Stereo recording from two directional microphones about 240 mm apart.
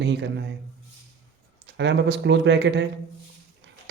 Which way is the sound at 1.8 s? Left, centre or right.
Right.